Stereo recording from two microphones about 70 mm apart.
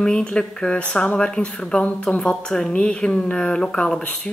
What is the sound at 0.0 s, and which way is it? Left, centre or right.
Speech, centre.